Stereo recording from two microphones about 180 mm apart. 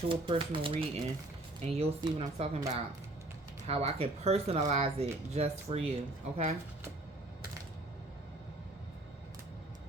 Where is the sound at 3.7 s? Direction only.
35° right (ahead or behind).